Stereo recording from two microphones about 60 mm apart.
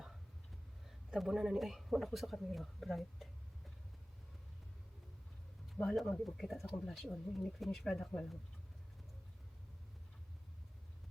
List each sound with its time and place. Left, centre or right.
0.9 s speech: centre
5.6 s speech: centre